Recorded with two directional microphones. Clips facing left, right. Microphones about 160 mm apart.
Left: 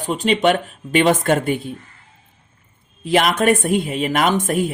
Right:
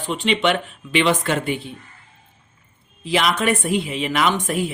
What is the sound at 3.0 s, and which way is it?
Speech, 50° left (ahead or behind).